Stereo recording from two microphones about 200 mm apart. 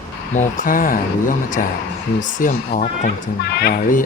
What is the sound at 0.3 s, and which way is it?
Speech, 40° left (ahead or behind).